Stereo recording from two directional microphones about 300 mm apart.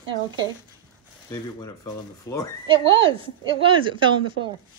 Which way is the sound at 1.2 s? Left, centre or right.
Centre.